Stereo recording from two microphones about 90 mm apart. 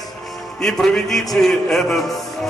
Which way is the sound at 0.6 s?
5° left (ahead or behind).